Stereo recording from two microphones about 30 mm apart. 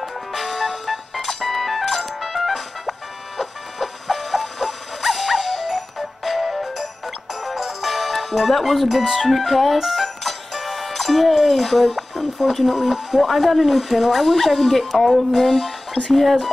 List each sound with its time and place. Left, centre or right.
0.0 s music: centre
9.2 s speech: centre